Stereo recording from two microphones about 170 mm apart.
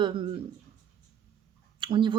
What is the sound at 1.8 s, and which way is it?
Speech, 30° right (ahead or behind).